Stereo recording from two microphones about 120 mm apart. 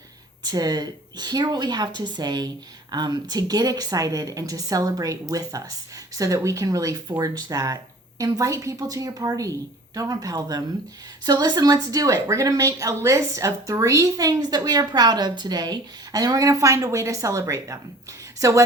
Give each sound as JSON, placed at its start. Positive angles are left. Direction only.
{"t": 0.4, "sound": "a woman's voice", "side_deg": -35}